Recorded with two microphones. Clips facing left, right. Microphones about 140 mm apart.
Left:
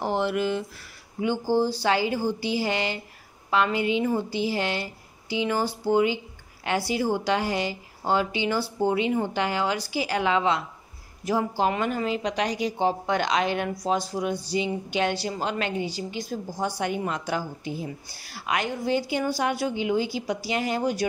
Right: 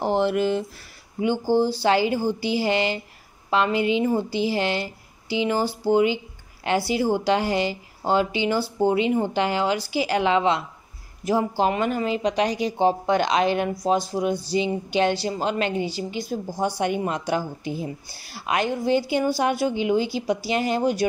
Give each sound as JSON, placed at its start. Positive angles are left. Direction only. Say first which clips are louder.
{"t": 0.0, "sound": "speech", "louder": "right 4 dB", "side_deg": -30}
{"t": 16.3, "sound": "speech", "louder": "right 5 dB", "side_deg": -10}